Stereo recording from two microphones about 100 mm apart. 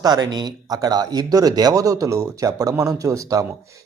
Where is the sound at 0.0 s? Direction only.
40° right (ahead or behind).